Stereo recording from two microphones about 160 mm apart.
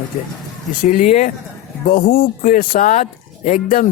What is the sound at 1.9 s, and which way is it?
Speech, 65° left (ahead or behind).